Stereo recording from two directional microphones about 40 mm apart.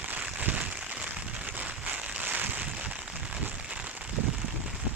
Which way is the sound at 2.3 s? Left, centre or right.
Right.